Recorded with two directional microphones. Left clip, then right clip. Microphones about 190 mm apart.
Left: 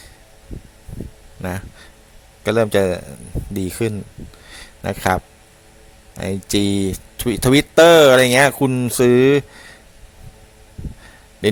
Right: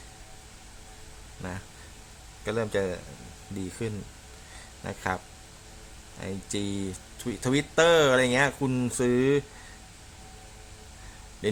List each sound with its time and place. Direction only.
1.4 s speech: 45° left (ahead or behind)
11.4 s speech: 45° left (ahead or behind)